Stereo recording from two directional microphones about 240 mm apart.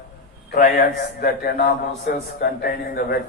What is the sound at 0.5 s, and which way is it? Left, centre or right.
A man's voice, left.